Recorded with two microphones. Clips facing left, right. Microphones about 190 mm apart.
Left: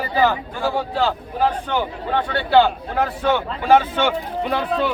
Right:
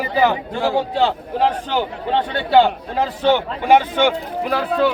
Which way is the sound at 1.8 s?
20° right (ahead or behind).